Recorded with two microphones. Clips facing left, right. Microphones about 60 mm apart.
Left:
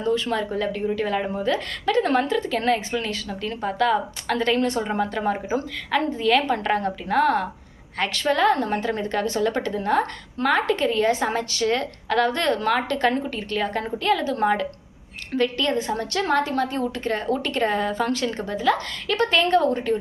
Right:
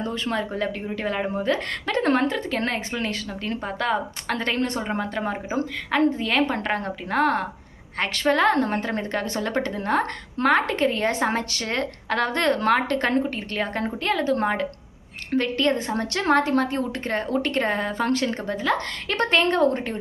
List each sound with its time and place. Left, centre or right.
0.0 s a woman's voice: right
1.5 s a woman's voice: right
4.9 s a woman's voice: right
16.0 s a woman's voice: right